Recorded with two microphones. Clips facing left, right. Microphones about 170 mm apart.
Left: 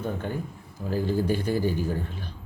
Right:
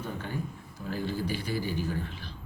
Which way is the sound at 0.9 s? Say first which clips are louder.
Left 7 dB; 45° left (ahead or behind).